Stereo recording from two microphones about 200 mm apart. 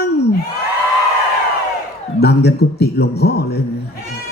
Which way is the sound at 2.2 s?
55° left (ahead or behind).